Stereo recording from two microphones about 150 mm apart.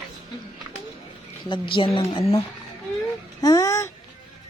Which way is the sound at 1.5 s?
35° left (ahead or behind).